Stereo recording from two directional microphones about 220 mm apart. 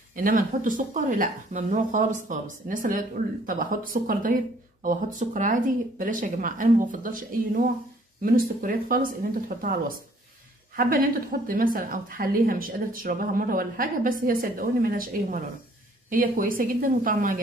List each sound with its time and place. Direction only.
0.1 s a woman's voice: 40° right (ahead or behind)